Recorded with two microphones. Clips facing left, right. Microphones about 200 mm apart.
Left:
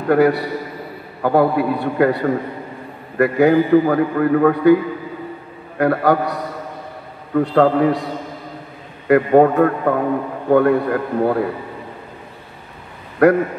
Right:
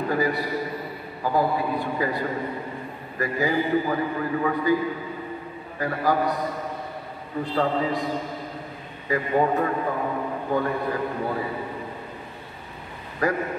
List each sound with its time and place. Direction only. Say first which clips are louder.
0.1 s a man's voice: left 13 dB; 70° left (ahead or behind)
5.8 s a man's voice: left 8 dB; 70° left (ahead or behind)
13.2 s a man's voice: left 12 dB; 65° left (ahead or behind)